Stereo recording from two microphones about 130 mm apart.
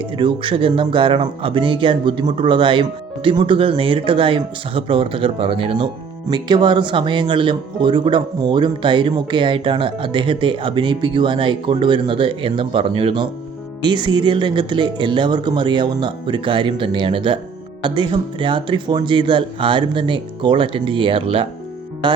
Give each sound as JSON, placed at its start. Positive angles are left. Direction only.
{"t": 0.0, "sound": "speech", "side_deg": -40}